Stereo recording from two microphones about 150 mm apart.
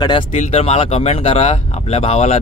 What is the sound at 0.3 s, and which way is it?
Speech, 45° left (ahead or behind).